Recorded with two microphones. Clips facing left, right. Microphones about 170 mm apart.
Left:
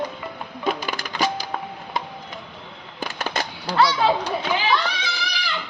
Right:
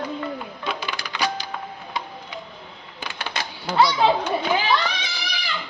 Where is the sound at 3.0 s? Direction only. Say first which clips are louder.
Left 4 dB; 45° left (ahead or behind).